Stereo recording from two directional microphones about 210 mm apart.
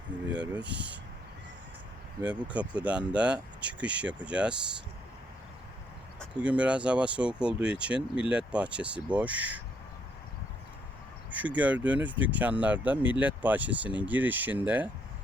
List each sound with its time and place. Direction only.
0.3 s speech: 5° right (ahead or behind)
0.6 s speech: 55° right (ahead or behind)
2.2 s speech: 5° right (ahead or behind)
6.4 s speech: 5° right (ahead or behind)
11.3 s speech: 5° right (ahead or behind)